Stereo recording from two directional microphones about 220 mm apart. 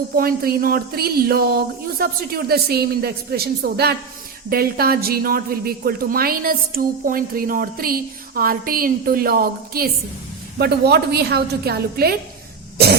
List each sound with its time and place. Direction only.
0.2 s a woman's voice: 40° right (ahead or behind)
12.7 s cough: 45° right (ahead or behind)